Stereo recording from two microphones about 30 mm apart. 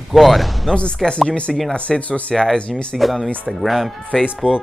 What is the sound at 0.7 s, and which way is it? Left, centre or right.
Speech, left.